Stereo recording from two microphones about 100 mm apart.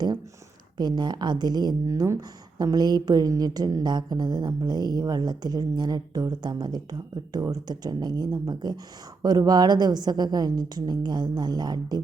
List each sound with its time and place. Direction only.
0.8 s a woman's voice: 45° right (ahead or behind)
1.9 s speech: 30° right (ahead or behind)
2.6 s a woman's voice: 40° right (ahead or behind)